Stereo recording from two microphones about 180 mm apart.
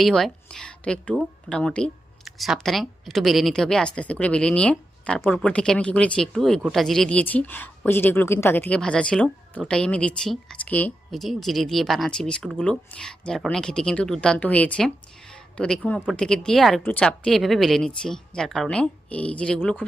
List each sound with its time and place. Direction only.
0.0 s speech: centre (ahead or behind)